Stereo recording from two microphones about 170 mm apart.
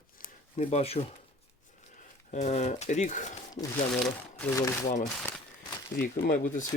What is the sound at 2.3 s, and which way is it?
Speech, 45° left (ahead or behind).